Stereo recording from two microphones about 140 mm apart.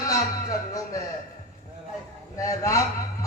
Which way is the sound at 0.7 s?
25° left (ahead or behind).